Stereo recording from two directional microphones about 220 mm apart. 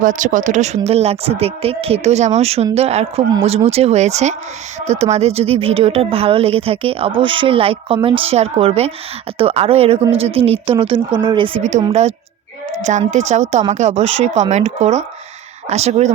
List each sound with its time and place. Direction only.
0.0 s a woman's voice: 35° right (ahead or behind)